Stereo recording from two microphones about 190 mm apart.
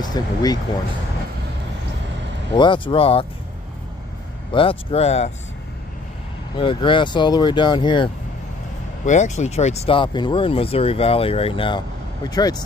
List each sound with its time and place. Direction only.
0.0 s speech: 20° left (ahead or behind)
2.5 s speech: 25° left (ahead or behind)
4.5 s speech: 30° left (ahead or behind)
6.6 s speech: 25° left (ahead or behind)
9.0 s speech: 40° left (ahead or behind); by 12.6 s 20° left (ahead or behind)